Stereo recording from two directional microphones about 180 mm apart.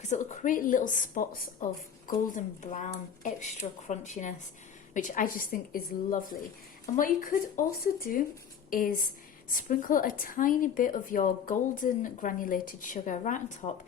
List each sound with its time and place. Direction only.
0.0 s a woman's voice: 40° left (ahead or behind)